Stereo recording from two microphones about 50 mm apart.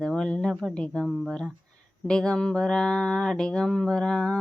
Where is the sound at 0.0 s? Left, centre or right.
Centre.